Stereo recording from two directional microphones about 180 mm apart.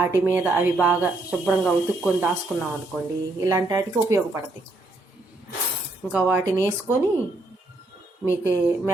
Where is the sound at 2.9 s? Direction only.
5° right (ahead or behind).